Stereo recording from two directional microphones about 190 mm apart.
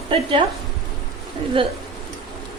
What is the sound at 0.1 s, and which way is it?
Speech, 25° right (ahead or behind).